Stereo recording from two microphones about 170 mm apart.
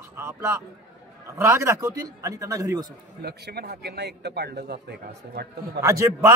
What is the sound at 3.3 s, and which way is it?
Speech, 70° right (ahead or behind).